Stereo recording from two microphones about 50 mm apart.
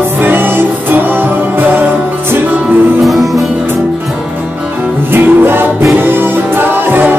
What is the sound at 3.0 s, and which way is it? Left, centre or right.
Music, centre.